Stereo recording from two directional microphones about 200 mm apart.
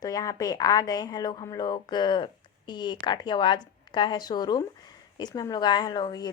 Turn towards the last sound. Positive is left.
turn(degrees=20)  # may be behind; listen again after turning